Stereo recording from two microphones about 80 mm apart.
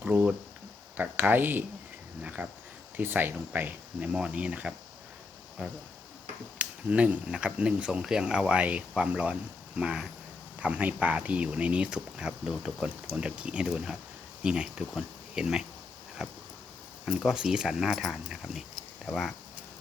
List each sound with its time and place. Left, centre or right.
0.0 s speech: centre
6.6 s speech: centre
16.2 s a sound: centre
17.1 s speech: centre